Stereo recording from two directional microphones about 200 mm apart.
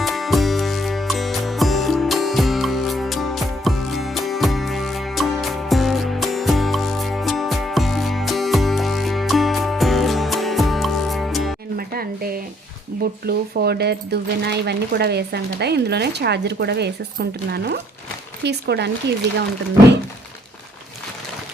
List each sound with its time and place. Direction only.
0.0 s music: centre (ahead or behind)
11.8 s a sound: 50° right (ahead or behind)
13.2 s speech: 55° right (ahead or behind)